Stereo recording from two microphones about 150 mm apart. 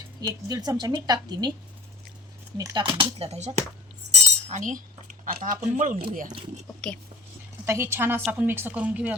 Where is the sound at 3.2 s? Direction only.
45° right (ahead or behind).